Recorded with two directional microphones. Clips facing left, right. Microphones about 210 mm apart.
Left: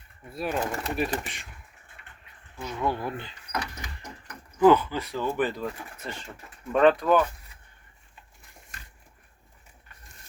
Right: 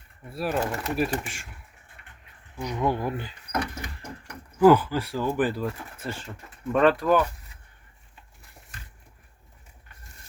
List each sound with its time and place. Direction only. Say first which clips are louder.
0.3 s speech: right 2 dB; centre (ahead or behind)
1.2 s door: right 1 dB; 50° right (ahead or behind)
2.6 s speech: right 3 dB; 15° right (ahead or behind)
3.5 s door: right 4 dB; 55° right (ahead or behind)
4.5 s speech: right 2 dB; 10° right (ahead or behind)